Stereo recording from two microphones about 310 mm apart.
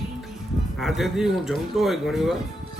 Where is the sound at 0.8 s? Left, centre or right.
Centre.